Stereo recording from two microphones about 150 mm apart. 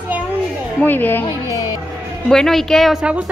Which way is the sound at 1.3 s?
20° left (ahead or behind).